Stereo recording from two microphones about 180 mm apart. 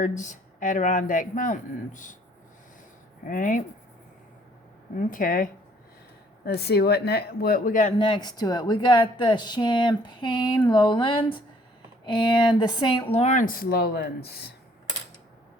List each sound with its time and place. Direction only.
0.0 s speech: 45° left (ahead or behind)
3.2 s speech: 50° left (ahead or behind)
4.9 s speech: 50° left (ahead or behind)
6.4 s speech: 65° left (ahead or behind); by 7.9 s 45° left (ahead or behind)
7.9 s speech: 25° left (ahead or behind)
13.1 s speech: 40° left (ahead or behind); by 14.5 s 60° left (ahead or behind)